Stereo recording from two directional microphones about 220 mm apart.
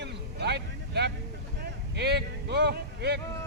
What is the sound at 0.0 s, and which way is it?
Vehicle, 50° right (ahead or behind).